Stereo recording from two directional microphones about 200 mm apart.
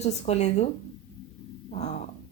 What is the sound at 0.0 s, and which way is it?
Speech, 35° left (ahead or behind).